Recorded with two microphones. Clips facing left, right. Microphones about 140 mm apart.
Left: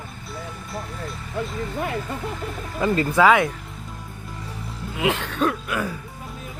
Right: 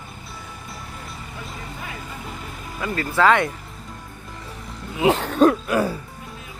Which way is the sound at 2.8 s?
25° left (ahead or behind).